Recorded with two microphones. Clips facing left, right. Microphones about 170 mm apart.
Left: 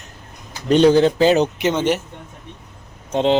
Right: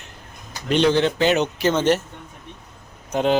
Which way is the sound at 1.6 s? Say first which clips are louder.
Even; 15° left (ahead or behind).